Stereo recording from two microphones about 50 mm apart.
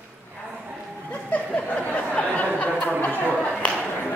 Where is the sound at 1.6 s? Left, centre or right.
Left.